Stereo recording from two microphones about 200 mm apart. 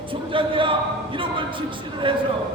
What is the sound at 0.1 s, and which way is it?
A man's voice, 25° right (ahead or behind).